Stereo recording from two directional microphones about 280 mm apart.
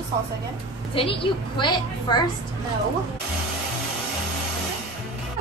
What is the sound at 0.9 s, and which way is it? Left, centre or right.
A woman's voice, centre.